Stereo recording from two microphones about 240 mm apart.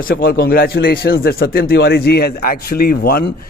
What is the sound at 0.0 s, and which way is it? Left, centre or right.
A man's voice, left.